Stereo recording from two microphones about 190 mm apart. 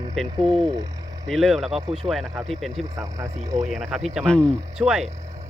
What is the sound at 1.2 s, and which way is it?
Speech, centre (ahead or behind).